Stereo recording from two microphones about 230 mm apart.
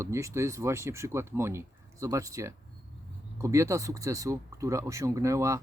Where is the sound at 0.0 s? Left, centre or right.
Centre.